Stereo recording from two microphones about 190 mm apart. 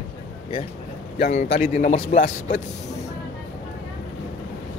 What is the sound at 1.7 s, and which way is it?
Speech, 45° left (ahead or behind).